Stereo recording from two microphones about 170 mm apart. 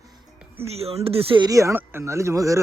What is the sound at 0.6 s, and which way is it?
Speech, 35° right (ahead or behind).